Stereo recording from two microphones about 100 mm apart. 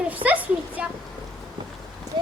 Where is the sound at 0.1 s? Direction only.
15° right (ahead or behind).